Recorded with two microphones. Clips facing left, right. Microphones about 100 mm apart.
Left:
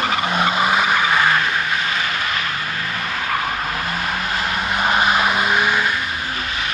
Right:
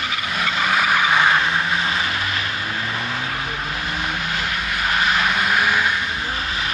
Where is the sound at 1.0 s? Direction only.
10° right (ahead or behind).